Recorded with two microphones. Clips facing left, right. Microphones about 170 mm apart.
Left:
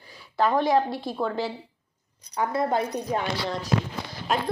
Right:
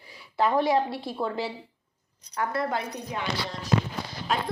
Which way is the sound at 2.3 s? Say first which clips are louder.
Left 3 dB; 20° left (ahead or behind).